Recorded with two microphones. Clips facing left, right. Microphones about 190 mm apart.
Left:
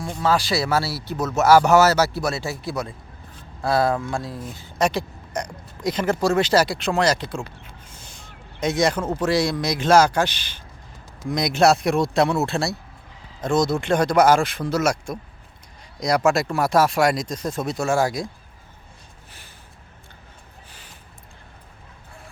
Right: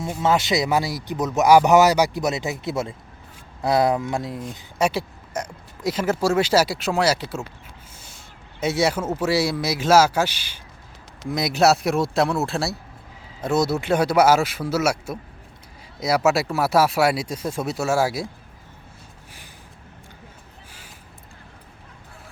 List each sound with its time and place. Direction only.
0.2 s speech: 20° right (ahead or behind)
4.8 s speech: 5° right (ahead or behind)
8.6 s speech: 5° right (ahead or behind)